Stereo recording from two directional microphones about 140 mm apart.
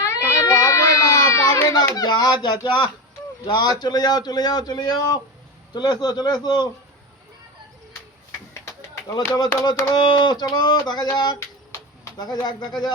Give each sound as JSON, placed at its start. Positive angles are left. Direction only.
{"t": 0.0, "sound": "baby cry", "side_deg": 20}
{"t": 3.4, "sound": "speech", "side_deg": 30}
{"t": 9.0, "sound": "speech", "side_deg": 30}
{"t": 9.9, "sound": "a sound", "side_deg": 35}